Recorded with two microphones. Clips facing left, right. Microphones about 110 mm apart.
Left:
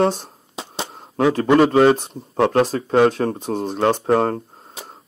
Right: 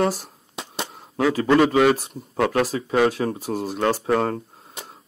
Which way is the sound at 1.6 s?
30° left (ahead or behind).